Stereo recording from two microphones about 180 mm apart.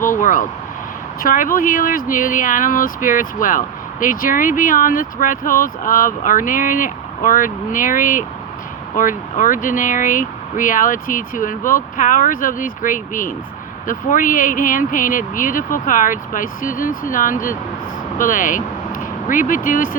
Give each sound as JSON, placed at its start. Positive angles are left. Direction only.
{"t": 0.2, "sound": "vehicle", "side_deg": 45}
{"t": 1.2, "sound": "speech", "side_deg": 50}